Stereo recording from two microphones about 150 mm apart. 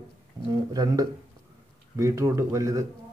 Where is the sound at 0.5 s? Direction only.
25° right (ahead or behind).